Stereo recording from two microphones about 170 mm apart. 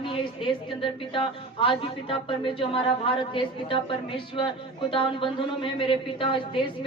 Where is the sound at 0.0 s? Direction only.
30° left (ahead or behind).